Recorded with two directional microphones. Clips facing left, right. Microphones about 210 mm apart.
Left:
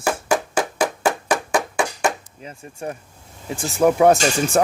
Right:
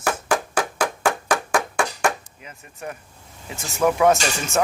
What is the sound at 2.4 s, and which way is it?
Speech, 35° left (ahead or behind).